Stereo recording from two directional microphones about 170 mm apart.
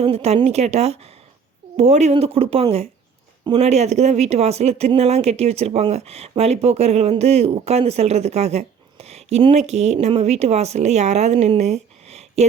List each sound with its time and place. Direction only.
0.0 s speech: 35° right (ahead or behind)